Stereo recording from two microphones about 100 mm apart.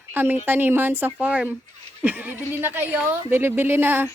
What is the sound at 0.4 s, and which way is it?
A woman's voice, 20° right (ahead or behind).